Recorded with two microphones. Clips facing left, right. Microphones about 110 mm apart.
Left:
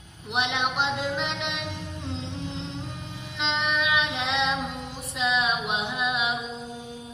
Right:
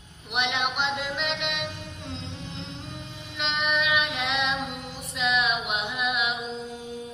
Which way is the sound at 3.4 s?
30° left (ahead or behind).